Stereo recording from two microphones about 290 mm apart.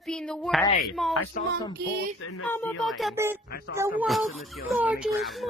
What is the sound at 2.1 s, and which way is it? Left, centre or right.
Speech, left.